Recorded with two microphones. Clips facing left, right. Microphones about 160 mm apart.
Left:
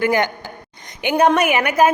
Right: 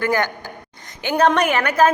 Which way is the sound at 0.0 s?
15° left (ahead or behind).